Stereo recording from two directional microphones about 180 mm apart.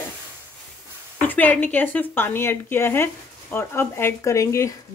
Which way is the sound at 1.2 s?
10° left (ahead or behind).